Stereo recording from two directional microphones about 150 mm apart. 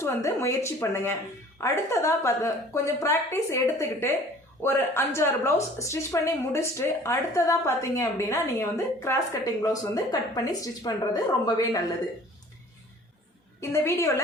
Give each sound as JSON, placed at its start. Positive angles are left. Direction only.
{"t": 0.0, "sound": "a woman's voice", "side_deg": 15}
{"t": 13.6, "sound": "speech", "side_deg": 20}